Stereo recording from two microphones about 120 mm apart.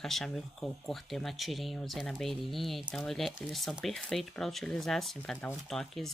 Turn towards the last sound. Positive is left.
turn(degrees=5)  # may be behind; listen again after turning